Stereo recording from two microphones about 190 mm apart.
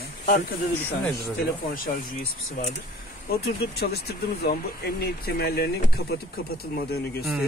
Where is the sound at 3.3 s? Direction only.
55° left (ahead or behind).